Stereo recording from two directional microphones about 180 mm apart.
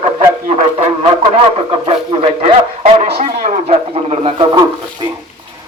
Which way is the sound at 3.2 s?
40° right (ahead or behind).